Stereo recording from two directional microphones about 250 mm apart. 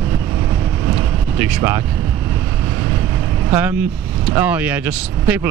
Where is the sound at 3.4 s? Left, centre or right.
Centre.